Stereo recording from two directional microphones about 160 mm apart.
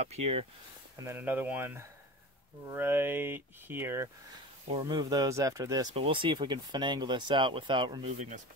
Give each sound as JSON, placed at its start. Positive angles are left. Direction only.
{"t": 0.0, "sound": "speech", "side_deg": -40}
{"t": 0.9, "sound": "speech", "side_deg": -15}
{"t": 4.6, "sound": "speech", "side_deg": -30}
{"t": 5.9, "sound": "speech", "side_deg": -30}